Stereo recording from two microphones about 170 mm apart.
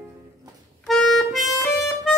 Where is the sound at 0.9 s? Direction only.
Centre (ahead or behind).